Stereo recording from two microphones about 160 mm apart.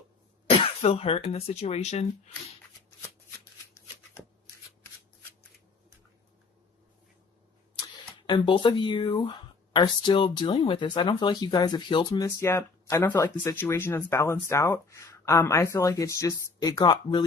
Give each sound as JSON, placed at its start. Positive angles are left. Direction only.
{"t": 0.6, "sound": "throat clearing", "side_deg": 40}
{"t": 1.3, "sound": "speech", "side_deg": 40}
{"t": 8.3, "sound": "speech", "side_deg": 30}
{"t": 12.4, "sound": "speech", "side_deg": 15}